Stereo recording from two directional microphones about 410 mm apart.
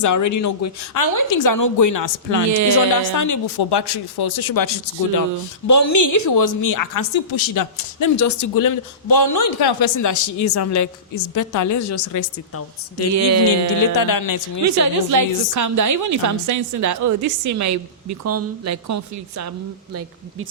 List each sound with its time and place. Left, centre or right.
0.0 s a woman's voice: left
13.1 s speech: right
13.9 s a woman's voice: left
14.8 s a woman's voice: right